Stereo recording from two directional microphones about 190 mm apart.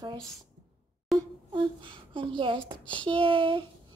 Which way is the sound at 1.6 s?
25° right (ahead or behind).